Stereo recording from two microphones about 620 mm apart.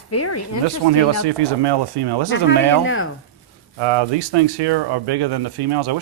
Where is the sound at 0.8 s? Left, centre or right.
Right.